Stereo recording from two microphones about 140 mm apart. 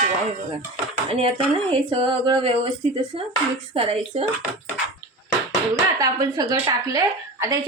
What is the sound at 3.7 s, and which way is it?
Speech, 45° right (ahead or behind).